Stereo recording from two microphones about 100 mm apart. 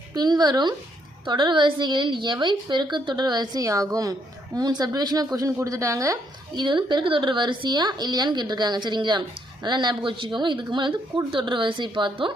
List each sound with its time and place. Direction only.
0.1 s a woman's voice: 45° right (ahead or behind)
6.6 s a woman's voice: 50° right (ahead or behind)